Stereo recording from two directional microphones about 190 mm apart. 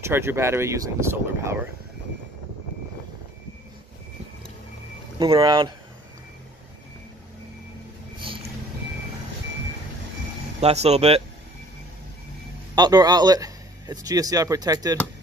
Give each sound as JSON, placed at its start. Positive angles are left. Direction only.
{"t": 0.0, "sound": "speech", "side_deg": -15}
{"t": 5.2, "sound": "speech", "side_deg": -25}
{"t": 10.6, "sound": "speech", "side_deg": -35}
{"t": 12.7, "sound": "a man's voice", "side_deg": -20}